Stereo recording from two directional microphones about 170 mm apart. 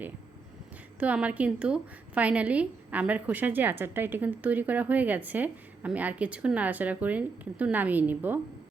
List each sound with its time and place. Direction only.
0.9 s a woman's voice: 10° right (ahead or behind)